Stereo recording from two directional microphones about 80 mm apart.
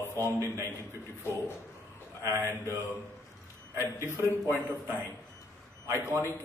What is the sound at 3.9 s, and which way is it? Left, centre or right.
Speech, left.